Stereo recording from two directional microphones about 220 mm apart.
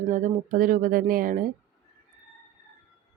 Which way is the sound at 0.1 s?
35° right (ahead or behind).